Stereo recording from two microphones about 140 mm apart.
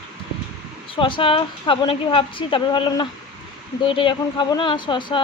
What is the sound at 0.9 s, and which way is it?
Speech, 40° left (ahead or behind).